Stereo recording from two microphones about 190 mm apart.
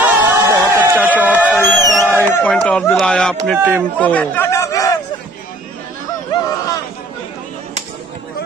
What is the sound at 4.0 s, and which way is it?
Chatter, 10° left (ahead or behind).